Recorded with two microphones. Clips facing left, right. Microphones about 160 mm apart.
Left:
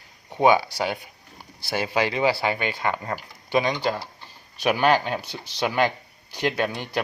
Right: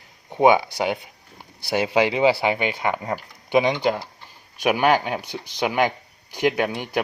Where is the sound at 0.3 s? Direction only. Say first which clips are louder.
Right 2 dB; 15° right (ahead or behind).